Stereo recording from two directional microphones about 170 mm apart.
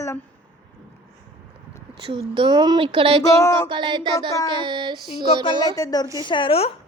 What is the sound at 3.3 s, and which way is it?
Speech, 20° left (ahead or behind).